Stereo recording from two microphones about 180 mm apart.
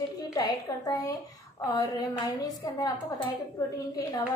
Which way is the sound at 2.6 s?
20° left (ahead or behind).